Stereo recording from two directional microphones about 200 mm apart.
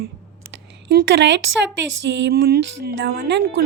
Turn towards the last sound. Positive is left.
turn(degrees=-55)  # may be behind; listen again after turning